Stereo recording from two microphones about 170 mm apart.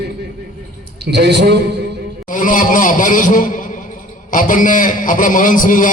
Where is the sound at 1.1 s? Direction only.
75° right (ahead or behind).